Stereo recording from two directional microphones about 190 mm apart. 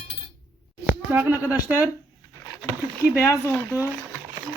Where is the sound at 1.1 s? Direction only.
10° right (ahead or behind).